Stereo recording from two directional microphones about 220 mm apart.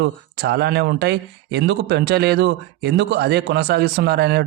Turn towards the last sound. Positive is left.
turn(degrees=-50)  # may be behind; listen again after turning